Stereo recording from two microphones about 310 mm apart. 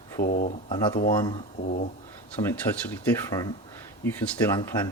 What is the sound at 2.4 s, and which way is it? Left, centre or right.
Speech, centre.